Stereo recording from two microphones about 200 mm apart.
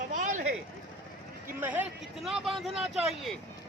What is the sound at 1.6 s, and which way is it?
Speech, 10° right (ahead or behind).